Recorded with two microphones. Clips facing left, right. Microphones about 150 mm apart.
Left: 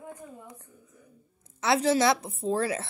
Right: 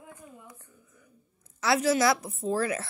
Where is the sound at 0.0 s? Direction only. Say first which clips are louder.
Left 5 dB; 40° left (ahead or behind).